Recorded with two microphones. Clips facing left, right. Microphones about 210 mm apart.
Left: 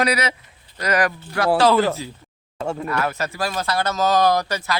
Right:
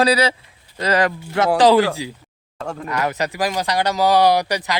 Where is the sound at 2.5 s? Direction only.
Centre (ahead or behind).